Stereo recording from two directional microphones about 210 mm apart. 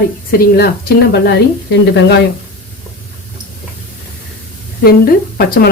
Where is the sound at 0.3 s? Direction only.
45° left (ahead or behind).